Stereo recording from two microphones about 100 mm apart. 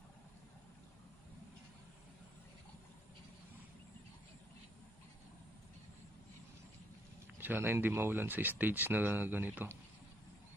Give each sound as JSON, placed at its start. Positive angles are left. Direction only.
{"t": 7.3, "sound": "speech", "side_deg": -20}